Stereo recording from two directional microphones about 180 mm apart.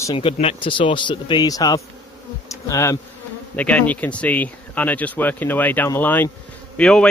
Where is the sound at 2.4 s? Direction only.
15° left (ahead or behind).